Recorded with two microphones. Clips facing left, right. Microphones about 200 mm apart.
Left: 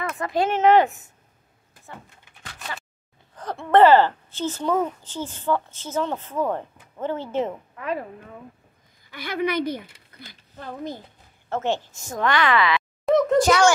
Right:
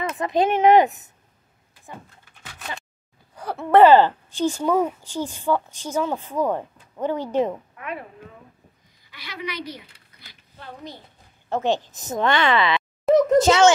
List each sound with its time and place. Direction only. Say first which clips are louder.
0.1 s speech: right 3 dB; 20° right (ahead or behind)
3.4 s a sound: right 1 dB; 10° right (ahead or behind)
3.7 s a woman's voice: right 2 dB; 15° right (ahead or behind)
7.7 s chop: left 5 dB; 35° left (ahead or behind)
9.1 s speech: left 9 dB; 50° left (ahead or behind)
11.4 s speech: right 2 dB; 15° right (ahead or behind)
13.0 s a sound: right 3 dB; 5° right (ahead or behind)
13.4 s speech: right 2 dB; 20° right (ahead or behind)